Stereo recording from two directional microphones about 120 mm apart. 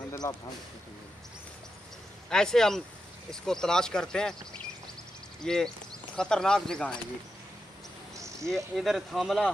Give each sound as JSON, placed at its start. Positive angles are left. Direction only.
{"t": 0.2, "sound": "speech", "side_deg": 25}
{"t": 2.2, "sound": "speech", "side_deg": 5}
{"t": 5.4, "sound": "speech", "side_deg": 5}
{"t": 8.5, "sound": "speech", "side_deg": 0}